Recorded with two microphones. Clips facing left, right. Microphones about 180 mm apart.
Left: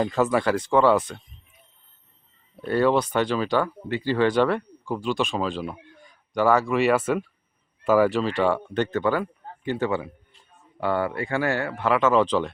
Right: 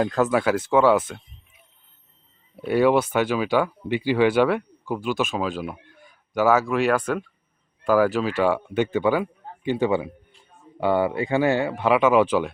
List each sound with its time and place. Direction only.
0.0 s speech: centre (ahead or behind)
2.6 s a man's voice: 10° right (ahead or behind)